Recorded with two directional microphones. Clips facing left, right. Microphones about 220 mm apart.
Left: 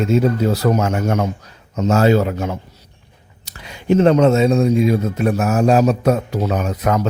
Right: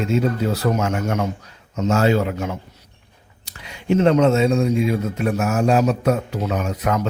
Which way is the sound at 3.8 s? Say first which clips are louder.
Left 3 dB; 40° left (ahead or behind).